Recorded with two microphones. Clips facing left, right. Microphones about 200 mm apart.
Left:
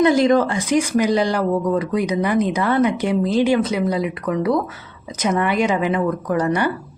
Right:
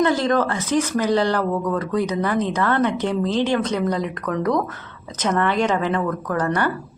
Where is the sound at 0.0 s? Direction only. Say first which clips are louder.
Left 4 dB; 15° left (ahead or behind).